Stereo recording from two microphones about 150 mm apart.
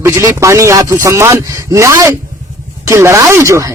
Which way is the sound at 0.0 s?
20° right (ahead or behind).